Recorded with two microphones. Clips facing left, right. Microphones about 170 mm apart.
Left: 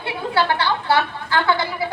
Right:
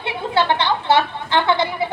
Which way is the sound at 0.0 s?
20° right (ahead or behind).